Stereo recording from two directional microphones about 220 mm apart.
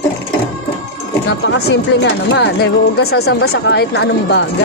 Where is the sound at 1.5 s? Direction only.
60° left (ahead or behind).